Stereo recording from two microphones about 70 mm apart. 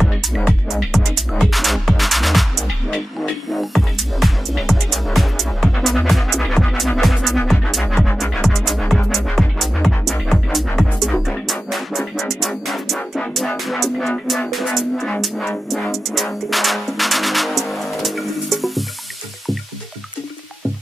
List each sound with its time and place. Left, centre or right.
0.0 s music: centre